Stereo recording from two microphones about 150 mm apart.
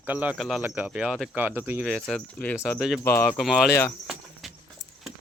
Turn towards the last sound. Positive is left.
turn(degrees=0)  # may be behind; listen again after turning